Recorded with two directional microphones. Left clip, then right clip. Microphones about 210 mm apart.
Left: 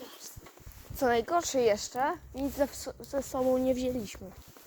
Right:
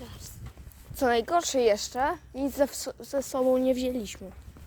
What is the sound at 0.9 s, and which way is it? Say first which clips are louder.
Speech: right 3 dB; 25° right (ahead or behind).